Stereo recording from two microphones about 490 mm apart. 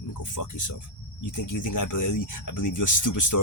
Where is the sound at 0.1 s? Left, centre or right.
Left.